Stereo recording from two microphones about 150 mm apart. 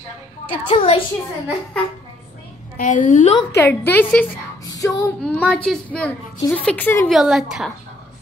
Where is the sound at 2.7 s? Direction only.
60° left (ahead or behind).